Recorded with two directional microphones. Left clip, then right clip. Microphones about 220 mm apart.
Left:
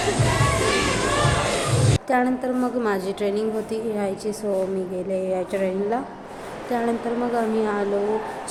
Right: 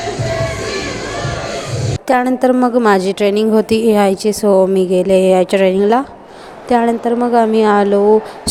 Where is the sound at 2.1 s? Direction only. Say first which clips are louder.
Right 11 dB; 40° right (ahead or behind).